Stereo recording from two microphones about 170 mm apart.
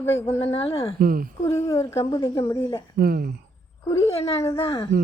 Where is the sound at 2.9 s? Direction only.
65° right (ahead or behind).